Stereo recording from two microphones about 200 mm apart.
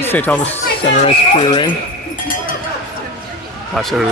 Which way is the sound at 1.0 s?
25° left (ahead or behind).